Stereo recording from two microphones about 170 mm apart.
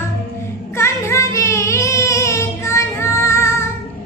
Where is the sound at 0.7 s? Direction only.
15° left (ahead or behind).